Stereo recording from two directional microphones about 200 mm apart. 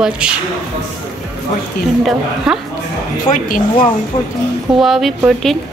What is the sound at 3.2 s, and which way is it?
Speech, 40° left (ahead or behind).